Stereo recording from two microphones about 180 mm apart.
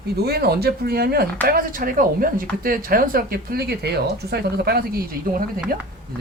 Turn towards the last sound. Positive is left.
turn(degrees=-55)  # may be behind; listen again after turning